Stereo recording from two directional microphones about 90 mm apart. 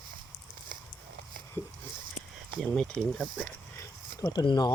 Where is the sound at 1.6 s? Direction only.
20° left (ahead or behind).